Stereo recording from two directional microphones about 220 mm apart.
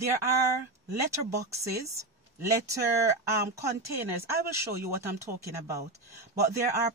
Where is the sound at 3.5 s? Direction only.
10° right (ahead or behind).